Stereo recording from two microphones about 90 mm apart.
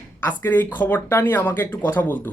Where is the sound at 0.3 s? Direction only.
20° left (ahead or behind).